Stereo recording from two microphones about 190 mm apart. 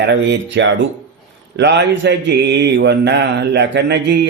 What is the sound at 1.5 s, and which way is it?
Mantra, 65° right (ahead or behind).